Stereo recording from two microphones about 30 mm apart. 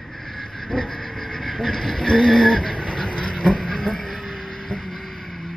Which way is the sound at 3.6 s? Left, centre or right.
Centre.